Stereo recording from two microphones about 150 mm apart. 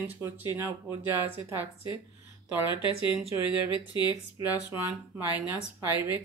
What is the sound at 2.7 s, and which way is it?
Speech, 35° left (ahead or behind).